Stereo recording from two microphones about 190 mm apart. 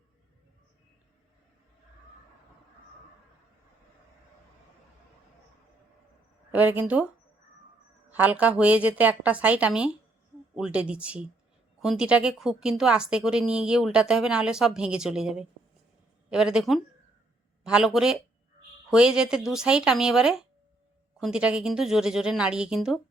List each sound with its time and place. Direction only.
6.5 s a woman's voice: 10° right (ahead or behind)
8.1 s a woman's voice: 10° right (ahead or behind)